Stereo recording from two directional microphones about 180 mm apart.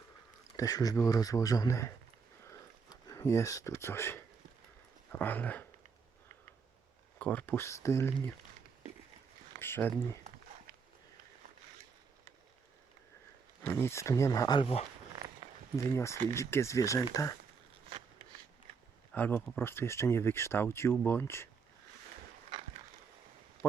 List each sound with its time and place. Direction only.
0.5 s speech: 20° left (ahead or behind)
3.1 s speech: 15° left (ahead or behind)
7.2 s speech: 10° left (ahead or behind)
9.6 s speech: 10° left (ahead or behind)
13.7 s speech: 15° left (ahead or behind); by 14.8 s 35° left (ahead or behind)
15.7 s speech: 15° left (ahead or behind)
19.1 s speech: 10° left (ahead or behind)